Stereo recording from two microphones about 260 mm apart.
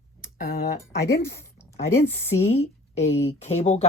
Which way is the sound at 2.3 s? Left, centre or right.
Left.